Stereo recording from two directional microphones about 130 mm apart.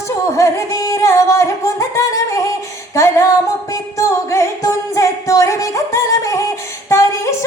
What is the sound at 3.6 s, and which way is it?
Music, 25° left (ahead or behind).